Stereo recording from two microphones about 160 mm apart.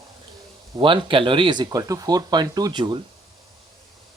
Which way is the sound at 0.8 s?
30° right (ahead or behind).